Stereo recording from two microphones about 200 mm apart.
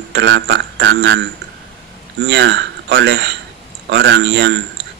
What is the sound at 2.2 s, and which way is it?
Speech, 60° right (ahead or behind).